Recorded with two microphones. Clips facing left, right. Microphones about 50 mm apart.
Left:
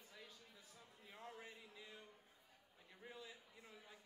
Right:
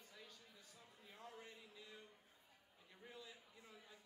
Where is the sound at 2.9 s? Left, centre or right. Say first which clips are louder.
Left 2 dB; centre.